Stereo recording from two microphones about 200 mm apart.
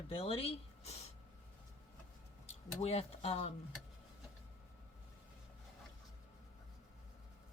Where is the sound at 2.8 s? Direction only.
30° left (ahead or behind).